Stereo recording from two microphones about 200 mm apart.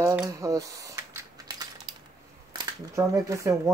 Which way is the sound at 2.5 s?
20° right (ahead or behind).